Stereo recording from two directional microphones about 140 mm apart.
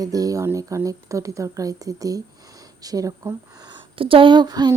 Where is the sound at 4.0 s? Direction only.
40° right (ahead or behind).